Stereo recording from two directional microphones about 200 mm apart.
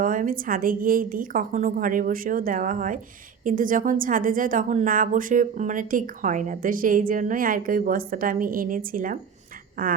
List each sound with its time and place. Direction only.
0.0 s a woman's voice: 40° right (ahead or behind)